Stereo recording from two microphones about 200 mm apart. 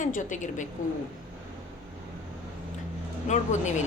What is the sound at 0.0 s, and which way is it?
Speech, 40° left (ahead or behind).